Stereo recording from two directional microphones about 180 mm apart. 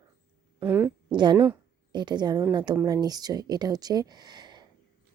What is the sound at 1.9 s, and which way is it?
A woman's voice, 25° right (ahead or behind).